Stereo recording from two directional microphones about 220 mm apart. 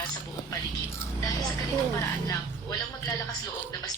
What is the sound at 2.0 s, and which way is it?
Vehicle, 15° left (ahead or behind).